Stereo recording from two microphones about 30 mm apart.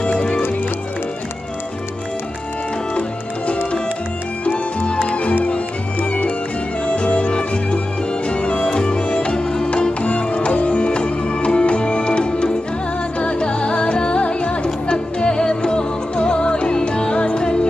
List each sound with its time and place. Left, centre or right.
2.9 s music: left
5.9 s music: left
6.9 s music: left
8.3 s music: left
10.0 s music: left